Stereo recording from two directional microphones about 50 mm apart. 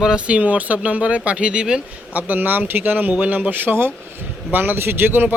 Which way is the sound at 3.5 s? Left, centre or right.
Right.